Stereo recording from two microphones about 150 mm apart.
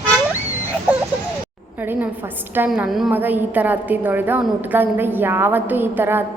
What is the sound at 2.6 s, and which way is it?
A woman's voice, 5° right (ahead or behind).